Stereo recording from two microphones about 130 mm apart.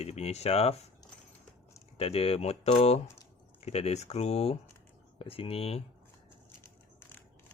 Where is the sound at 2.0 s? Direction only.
50° left (ahead or behind).